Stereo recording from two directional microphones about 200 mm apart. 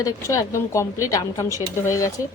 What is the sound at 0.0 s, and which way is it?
Speech, 15° left (ahead or behind).